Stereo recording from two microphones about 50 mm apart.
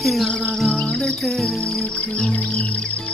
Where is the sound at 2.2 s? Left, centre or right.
Left.